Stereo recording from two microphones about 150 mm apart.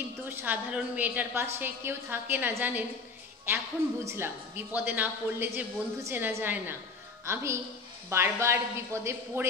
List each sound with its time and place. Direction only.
0.3 s a woman's voice: 15° right (ahead or behind)